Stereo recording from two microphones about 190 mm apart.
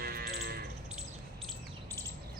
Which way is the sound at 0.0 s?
55° right (ahead or behind).